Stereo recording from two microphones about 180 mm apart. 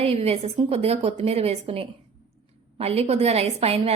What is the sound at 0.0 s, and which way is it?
A woman's voice, 35° right (ahead or behind).